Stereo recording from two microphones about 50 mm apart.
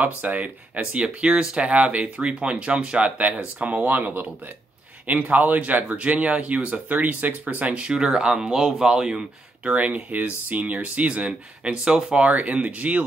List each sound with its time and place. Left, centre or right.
0.0 s speech: right
1.4 s speech: centre
1.7 s speech: right
9.7 s speech: right